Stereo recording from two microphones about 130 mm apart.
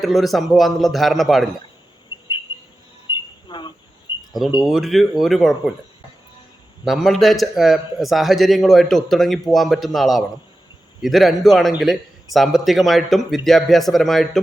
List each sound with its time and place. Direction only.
0.0 s speech: centre (ahead or behind)
3.1 s a sound: 35° left (ahead or behind)
4.3 s speech: centre (ahead or behind)
6.8 s speech: centre (ahead or behind)